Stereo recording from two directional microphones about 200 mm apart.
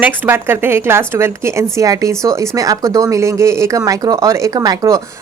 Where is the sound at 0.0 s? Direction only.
10° right (ahead or behind).